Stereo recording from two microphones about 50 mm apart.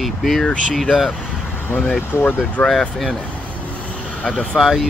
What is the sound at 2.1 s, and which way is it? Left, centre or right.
Speech, left.